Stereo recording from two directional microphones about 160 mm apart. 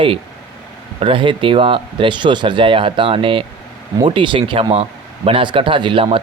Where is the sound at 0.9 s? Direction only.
35° right (ahead or behind).